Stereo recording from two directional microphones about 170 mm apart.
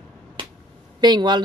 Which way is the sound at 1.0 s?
25° right (ahead or behind).